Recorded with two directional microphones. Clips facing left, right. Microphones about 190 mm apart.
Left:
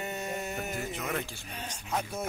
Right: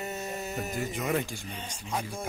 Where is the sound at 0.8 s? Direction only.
15° right (ahead or behind).